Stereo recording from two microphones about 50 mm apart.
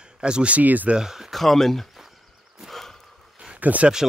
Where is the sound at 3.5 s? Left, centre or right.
Right.